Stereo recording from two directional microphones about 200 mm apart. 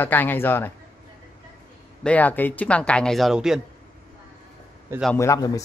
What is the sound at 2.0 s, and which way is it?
Speech, 10° left (ahead or behind).